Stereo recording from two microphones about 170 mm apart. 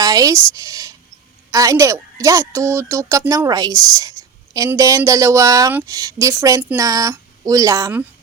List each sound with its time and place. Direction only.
0.0 s a woman's voice: 20° right (ahead or behind)